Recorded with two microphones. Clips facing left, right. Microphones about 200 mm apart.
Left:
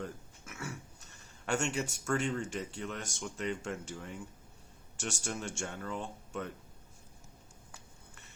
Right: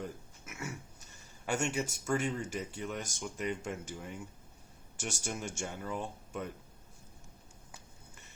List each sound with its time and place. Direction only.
0.0 s a sound: 10° right (ahead or behind)
1.5 s speech: 5° right (ahead or behind)
5.2 s speech: 10° right (ahead or behind)